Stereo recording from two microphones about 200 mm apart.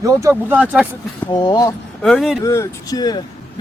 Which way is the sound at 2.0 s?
Centre (ahead or behind).